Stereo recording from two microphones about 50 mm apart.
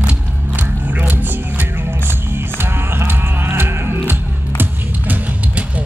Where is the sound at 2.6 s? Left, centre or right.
Right.